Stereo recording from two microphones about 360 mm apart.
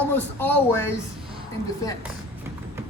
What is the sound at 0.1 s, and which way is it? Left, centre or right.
Speech, centre.